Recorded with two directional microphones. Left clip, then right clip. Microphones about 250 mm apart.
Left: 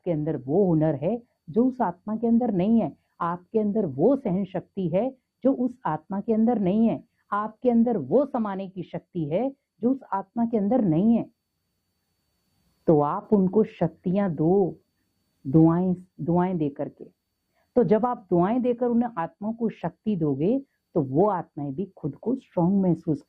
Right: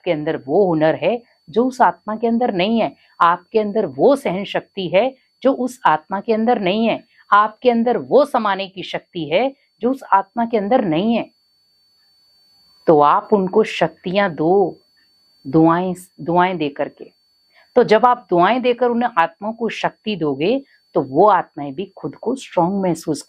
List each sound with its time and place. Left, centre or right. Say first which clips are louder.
0.0 s speech: right 8 dB; centre
12.8 s speech: right 10 dB; centre
14.4 s speech: right 5 dB; right
15.6 s speech: right 7 dB; centre
20.9 s speech: right 8 dB; right
21.2 s speech: right 12 dB; centre
22.4 s speech: right 10 dB; centre